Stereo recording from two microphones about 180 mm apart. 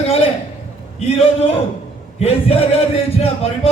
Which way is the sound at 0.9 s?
35° left (ahead or behind).